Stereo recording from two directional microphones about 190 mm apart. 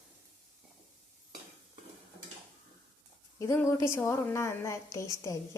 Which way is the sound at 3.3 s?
15° left (ahead or behind).